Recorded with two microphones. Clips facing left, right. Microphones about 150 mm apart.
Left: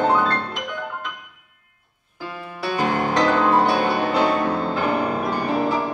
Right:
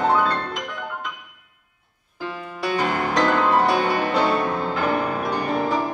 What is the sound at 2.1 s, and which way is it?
Music, 10° left (ahead or behind).